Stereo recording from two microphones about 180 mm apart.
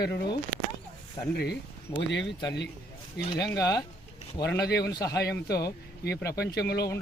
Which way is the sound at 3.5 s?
20° left (ahead or behind).